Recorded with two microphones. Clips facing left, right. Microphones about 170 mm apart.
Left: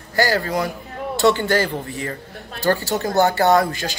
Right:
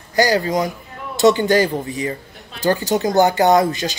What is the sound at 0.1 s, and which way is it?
A man's voice, 15° right (ahead or behind).